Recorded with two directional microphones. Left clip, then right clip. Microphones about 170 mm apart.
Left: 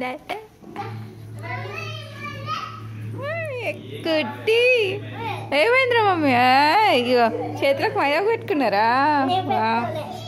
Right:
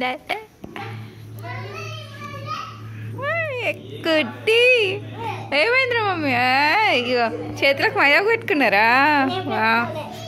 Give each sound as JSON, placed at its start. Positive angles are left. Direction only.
{"t": 0.0, "sound": "a sound", "side_deg": 5}
{"t": 3.2, "sound": "a child's voice", "side_deg": 0}
{"t": 5.5, "sound": "speech", "side_deg": 20}
{"t": 7.6, "sound": "a woman's voice", "side_deg": 10}